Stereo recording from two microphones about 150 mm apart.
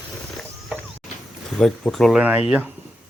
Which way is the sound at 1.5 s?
5° left (ahead or behind).